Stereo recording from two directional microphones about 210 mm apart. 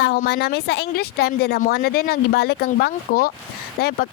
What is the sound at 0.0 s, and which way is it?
Speech, 50° left (ahead or behind).